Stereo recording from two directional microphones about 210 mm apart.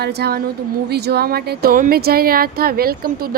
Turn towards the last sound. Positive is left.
turn(degrees=-45)  # may be behind; listen again after turning